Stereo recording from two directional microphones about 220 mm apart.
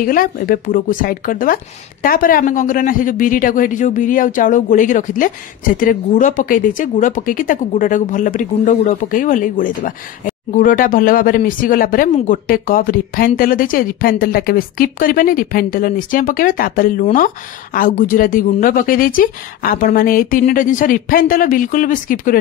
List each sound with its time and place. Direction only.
0.0 s speech: 40° left (ahead or behind)